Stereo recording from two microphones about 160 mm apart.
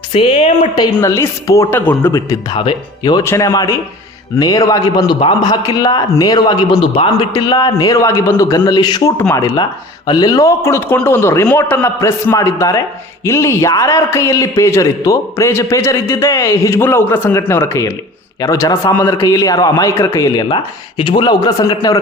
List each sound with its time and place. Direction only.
0.1 s a woman's voice: 35° left (ahead or behind)
0.9 s a man's voice: 15° left (ahead or behind)
2.5 s a man's voice: 30° left (ahead or behind)